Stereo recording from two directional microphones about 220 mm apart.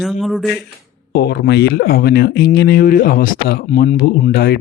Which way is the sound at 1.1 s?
50° left (ahead or behind).